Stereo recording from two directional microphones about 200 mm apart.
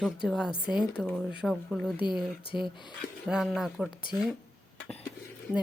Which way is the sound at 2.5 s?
10° right (ahead or behind).